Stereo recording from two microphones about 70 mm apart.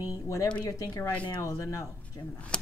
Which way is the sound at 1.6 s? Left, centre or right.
Left.